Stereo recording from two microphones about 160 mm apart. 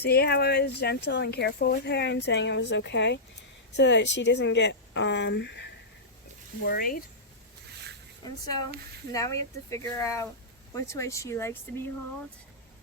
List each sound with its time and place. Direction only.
0.0 s speech: 85° left
6.7 s speech: 65° left (ahead or behind)
8.2 s speech: 25° left (ahead or behind)